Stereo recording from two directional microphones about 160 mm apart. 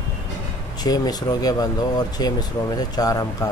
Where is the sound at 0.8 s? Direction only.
25° left (ahead or behind).